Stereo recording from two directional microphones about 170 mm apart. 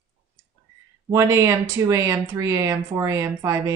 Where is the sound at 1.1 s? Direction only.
20° right (ahead or behind).